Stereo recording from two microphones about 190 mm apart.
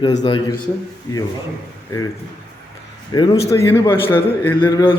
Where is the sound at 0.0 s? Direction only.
25° left (ahead or behind).